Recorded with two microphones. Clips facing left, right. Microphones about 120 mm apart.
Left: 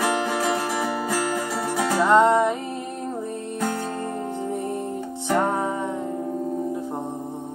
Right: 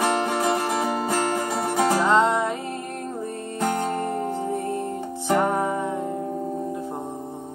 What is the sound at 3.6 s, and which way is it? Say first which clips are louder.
Music: right 4 dB; 20° right (ahead or behind).